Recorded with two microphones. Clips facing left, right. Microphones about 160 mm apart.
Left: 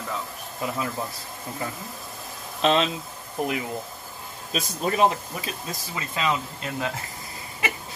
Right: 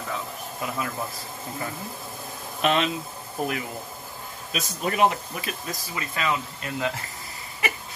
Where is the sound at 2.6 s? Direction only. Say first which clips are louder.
Left 2 dB; 30° left (ahead or behind).